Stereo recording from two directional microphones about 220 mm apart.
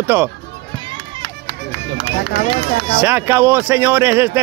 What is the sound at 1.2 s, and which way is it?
Run, 45° right (ahead or behind).